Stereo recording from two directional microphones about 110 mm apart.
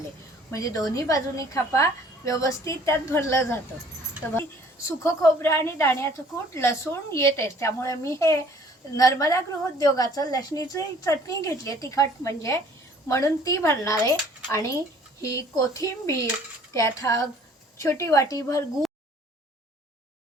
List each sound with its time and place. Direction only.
0.5 s a woman's voice: 30° left (ahead or behind)
4.9 s a woman's voice: 25° left (ahead or behind)